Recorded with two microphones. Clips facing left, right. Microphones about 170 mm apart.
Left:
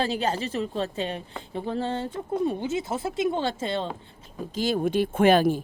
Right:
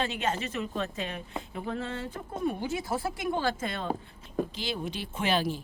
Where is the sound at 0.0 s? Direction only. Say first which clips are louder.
Left 4 dB; 35° left (ahead or behind).